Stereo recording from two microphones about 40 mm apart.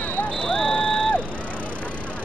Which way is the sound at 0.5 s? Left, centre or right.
Left.